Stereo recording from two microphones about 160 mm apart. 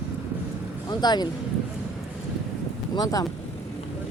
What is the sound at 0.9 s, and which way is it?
Speech, 25° left (ahead or behind).